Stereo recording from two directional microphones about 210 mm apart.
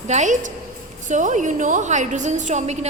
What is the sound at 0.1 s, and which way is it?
A woman's voice, 35° right (ahead or behind).